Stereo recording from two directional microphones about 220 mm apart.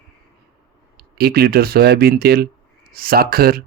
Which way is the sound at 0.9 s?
45° right (ahead or behind).